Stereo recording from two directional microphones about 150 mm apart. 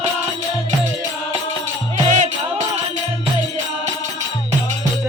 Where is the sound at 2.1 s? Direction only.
55° right (ahead or behind).